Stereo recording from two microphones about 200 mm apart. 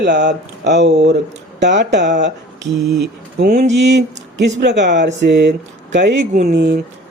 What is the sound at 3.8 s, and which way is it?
Speech, 60° right (ahead or behind).